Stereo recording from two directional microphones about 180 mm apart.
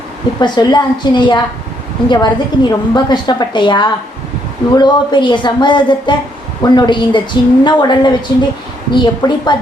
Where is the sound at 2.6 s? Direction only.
25° left (ahead or behind).